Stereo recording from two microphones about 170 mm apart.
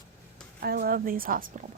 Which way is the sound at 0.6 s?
65° right (ahead or behind).